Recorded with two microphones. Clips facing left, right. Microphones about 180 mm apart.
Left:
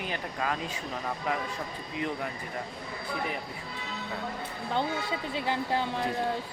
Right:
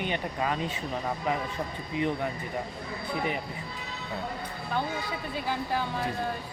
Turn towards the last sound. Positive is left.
turn(degrees=20)  # may be behind; listen again after turning